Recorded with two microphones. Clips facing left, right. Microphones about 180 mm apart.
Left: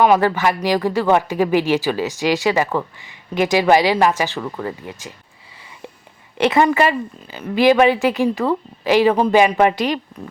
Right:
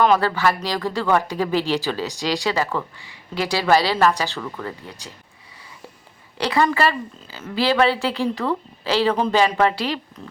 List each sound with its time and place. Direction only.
0.0 s speech: 15° left (ahead or behind)
6.3 s speech: 20° left (ahead or behind)